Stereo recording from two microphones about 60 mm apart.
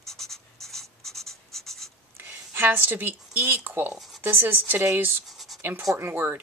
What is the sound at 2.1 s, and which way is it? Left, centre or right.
A woman's voice, right.